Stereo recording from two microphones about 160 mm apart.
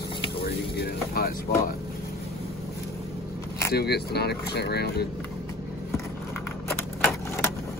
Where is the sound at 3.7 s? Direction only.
90° left.